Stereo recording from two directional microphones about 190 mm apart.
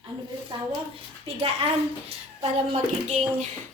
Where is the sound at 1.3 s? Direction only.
30° right (ahead or behind).